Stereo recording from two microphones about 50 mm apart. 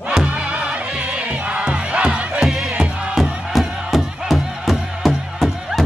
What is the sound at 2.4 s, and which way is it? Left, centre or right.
Music, centre.